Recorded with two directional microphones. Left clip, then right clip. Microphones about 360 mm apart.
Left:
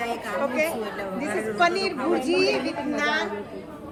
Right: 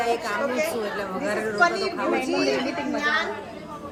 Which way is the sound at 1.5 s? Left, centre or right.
Left.